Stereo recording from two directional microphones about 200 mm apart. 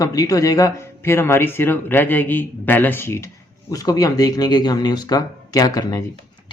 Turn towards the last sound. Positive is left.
turn(degrees=20)  # may be behind; listen again after turning